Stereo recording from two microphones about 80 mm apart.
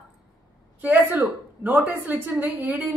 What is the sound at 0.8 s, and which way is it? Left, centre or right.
A woman's voice, right.